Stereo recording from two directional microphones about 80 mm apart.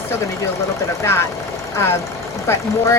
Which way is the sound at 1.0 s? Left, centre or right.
Left.